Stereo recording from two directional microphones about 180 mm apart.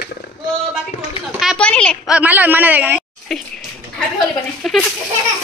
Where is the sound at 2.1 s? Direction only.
10° right (ahead or behind).